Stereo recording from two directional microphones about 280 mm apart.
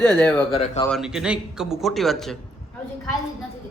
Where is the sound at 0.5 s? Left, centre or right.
Left.